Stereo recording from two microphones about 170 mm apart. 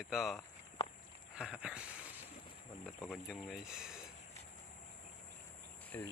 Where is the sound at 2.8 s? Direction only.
Centre (ahead or behind).